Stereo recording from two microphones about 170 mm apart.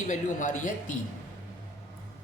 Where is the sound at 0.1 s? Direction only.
45° left (ahead or behind).